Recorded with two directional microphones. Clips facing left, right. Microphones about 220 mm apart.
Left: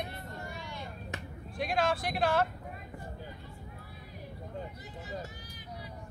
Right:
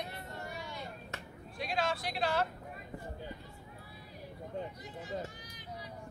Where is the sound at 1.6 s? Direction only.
50° left (ahead or behind).